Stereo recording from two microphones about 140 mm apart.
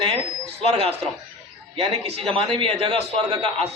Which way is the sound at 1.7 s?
45° right (ahead or behind).